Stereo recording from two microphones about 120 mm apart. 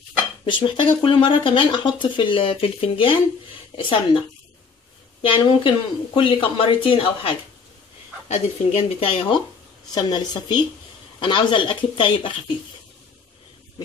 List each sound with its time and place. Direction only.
0.5 s speech: 45° left (ahead or behind)
5.2 s speech: 45° left (ahead or behind)
8.3 s speech: 60° left (ahead or behind)
9.9 s a woman's voice: 35° left (ahead or behind)